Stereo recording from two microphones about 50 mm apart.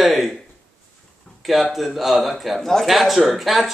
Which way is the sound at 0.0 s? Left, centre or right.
Centre.